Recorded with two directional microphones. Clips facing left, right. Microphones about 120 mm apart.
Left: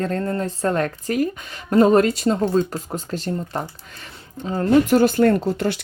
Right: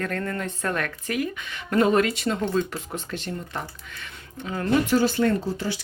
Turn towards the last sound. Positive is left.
turn(degrees=60)  # may be behind; listen again after turning